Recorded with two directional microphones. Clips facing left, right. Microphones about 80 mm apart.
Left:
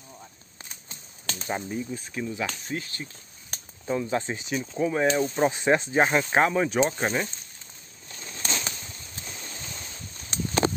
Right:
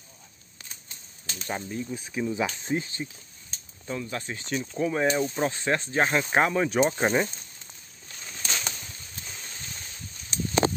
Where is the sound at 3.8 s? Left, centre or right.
Left.